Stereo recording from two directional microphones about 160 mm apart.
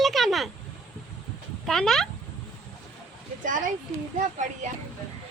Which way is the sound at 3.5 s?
55° right (ahead or behind).